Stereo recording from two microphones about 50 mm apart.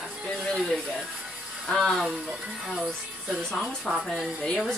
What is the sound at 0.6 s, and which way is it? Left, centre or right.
Speech, centre.